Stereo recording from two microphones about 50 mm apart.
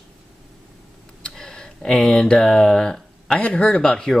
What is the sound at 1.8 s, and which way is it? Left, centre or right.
Speech, centre.